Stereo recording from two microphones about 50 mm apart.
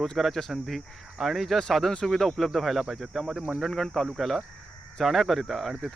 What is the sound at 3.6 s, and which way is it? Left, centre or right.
Speech, centre.